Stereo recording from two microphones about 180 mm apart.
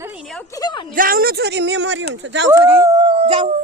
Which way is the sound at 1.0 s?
55° right (ahead or behind).